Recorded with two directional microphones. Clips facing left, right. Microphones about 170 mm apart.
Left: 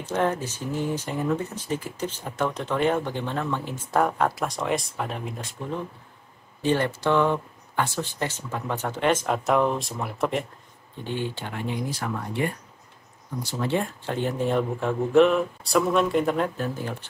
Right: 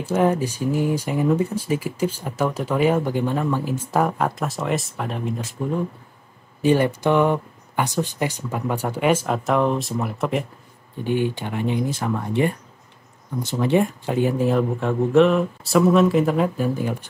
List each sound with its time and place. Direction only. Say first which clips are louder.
0.0 s speech: right 5 dB; 10° right (ahead or behind)
6.6 s speech: right 5 dB; 10° right (ahead or behind)
11.1 s speech: right 8 dB; 15° right (ahead or behind)